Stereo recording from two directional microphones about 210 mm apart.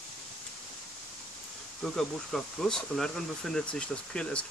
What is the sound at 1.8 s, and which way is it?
Speech, centre (ahead or behind).